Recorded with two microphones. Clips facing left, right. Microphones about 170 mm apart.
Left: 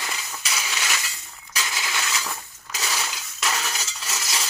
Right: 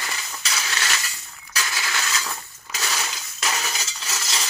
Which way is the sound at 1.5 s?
20° left (ahead or behind).